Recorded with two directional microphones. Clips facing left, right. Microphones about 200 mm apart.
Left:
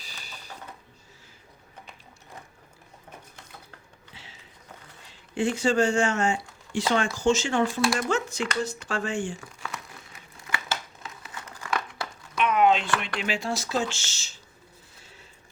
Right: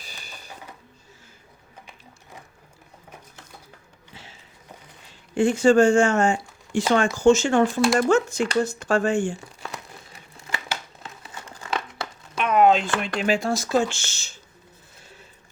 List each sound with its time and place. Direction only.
0.0 s a sound: 50° right (ahead or behind)
4.1 s sniff: 45° right (ahead or behind)
5.3 s speech: 45° right (ahead or behind)
8.6 s crumpling: 45° right (ahead or behind); by 12.4 s 25° right (ahead or behind)
12.4 s a sound: 40° right (ahead or behind)
13.0 s speech: 45° right (ahead or behind)